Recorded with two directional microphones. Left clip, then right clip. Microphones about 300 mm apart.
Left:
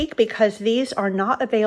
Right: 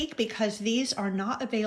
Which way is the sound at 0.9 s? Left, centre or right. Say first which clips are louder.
Left 10 dB; left.